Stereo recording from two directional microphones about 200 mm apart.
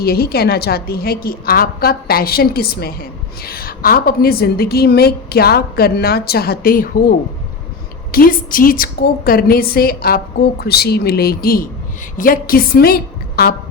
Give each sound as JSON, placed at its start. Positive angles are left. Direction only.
{"t": 0.0, "sound": "a woman's voice", "side_deg": 50}
{"t": 8.1, "sound": "a woman's voice", "side_deg": 45}